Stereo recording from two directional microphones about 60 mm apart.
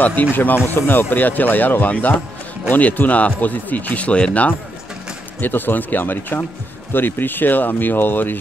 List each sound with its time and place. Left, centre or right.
0.0 s speech: left
5.4 s speech: left